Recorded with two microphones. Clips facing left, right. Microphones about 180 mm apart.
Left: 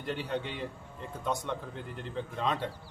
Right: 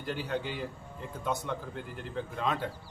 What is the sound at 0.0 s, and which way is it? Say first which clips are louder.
Speech: even; centre (ahead or behind).